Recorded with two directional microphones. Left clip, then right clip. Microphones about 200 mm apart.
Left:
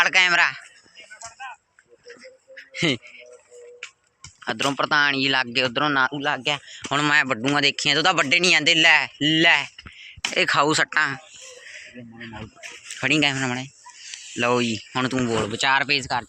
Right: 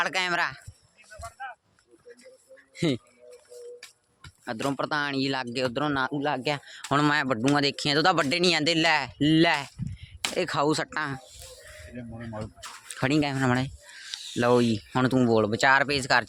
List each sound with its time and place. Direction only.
0.0 s speech: 15° right (ahead or behind)
2.6 s music: 15° right (ahead or behind)
4.4 s speech: centre (ahead or behind)
6.2 s speech: 30° right (ahead or behind)
10.3 s speech: 10° right (ahead or behind)
13.5 s a sound: 45° right (ahead or behind)
14.3 s speech: 30° right (ahead or behind)
15.3 s speech: 60° right (ahead or behind)
15.9 s speech: 40° right (ahead or behind)